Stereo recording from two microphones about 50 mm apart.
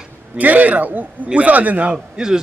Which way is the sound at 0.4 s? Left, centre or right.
Right.